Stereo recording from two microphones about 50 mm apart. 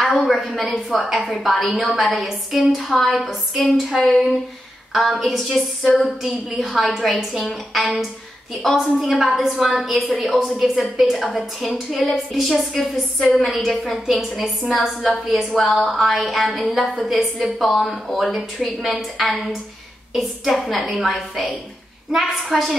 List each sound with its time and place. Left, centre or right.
0.0 s a woman's voice: centre
4.9 s a woman's voice: centre